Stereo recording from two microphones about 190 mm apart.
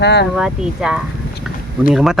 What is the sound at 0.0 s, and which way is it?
Speech, 60° left (ahead or behind).